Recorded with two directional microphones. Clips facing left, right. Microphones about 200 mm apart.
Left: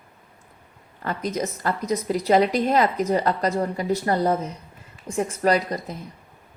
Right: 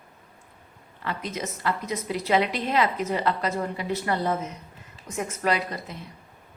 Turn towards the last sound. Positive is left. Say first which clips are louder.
# left 5 dB
turn(degrees=40)  # may be behind; listen again after turning